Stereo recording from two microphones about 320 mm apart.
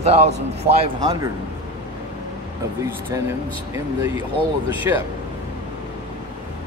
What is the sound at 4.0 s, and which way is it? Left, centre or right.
Speech, centre.